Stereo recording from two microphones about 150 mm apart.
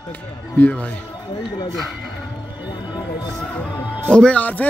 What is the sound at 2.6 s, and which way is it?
Speech, 30° left (ahead or behind).